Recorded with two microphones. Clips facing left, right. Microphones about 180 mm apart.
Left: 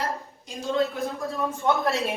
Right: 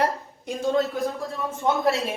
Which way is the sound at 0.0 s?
60° right (ahead or behind).